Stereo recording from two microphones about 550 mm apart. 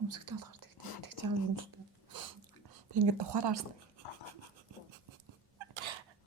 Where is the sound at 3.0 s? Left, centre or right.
Right.